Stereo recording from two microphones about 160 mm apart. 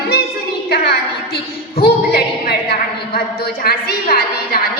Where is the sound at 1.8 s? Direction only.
75° left (ahead or behind).